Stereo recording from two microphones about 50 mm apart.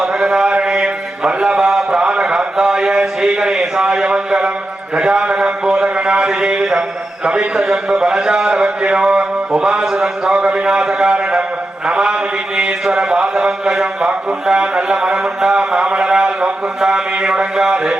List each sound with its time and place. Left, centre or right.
0.0 s mantra: centre
4.9 s a man's voice: centre